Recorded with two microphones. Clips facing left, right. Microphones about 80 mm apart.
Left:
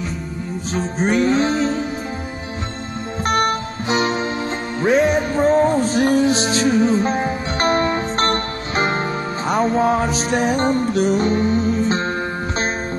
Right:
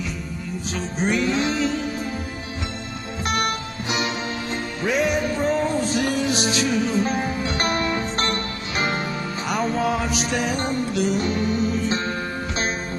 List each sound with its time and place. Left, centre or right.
0.7 s music: left
3.3 s music: left